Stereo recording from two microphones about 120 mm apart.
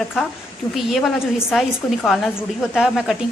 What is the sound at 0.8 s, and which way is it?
A woman's voice, centre (ahead or behind).